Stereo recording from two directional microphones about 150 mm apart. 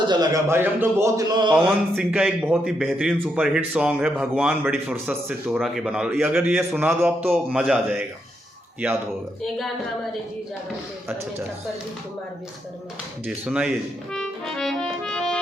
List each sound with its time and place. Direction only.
0.1 s a man's voice: 20° right (ahead or behind)
2.0 s a man's voice: 5° right (ahead or behind)
9.4 s speech: centre (ahead or behind)
13.4 s music: 5° right (ahead or behind)